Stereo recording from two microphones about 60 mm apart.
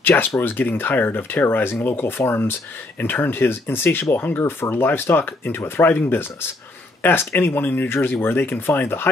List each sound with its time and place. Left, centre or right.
0.0 s speech: left